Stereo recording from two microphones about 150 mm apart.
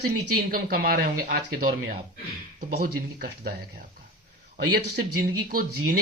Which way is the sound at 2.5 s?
80° right.